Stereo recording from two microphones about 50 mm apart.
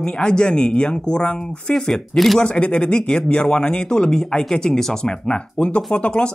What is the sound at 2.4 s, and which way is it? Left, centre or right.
A man's voice, left.